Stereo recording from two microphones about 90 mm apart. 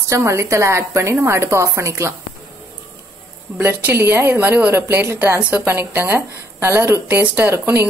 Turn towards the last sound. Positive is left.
turn(degrees=-25)  # may be behind; listen again after turning